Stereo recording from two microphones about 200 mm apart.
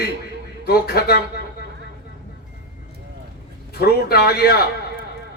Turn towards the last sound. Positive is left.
turn(degrees=50)  # may be behind; listen again after turning